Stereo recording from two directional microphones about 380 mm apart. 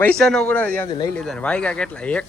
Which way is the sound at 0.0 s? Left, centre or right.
Centre.